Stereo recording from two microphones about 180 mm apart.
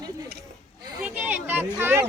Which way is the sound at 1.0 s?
10° right (ahead or behind).